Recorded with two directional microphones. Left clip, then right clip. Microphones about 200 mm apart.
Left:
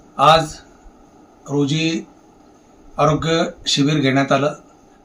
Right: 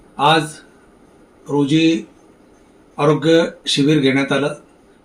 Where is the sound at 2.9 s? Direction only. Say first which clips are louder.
Right 3 dB; 15° left (ahead or behind).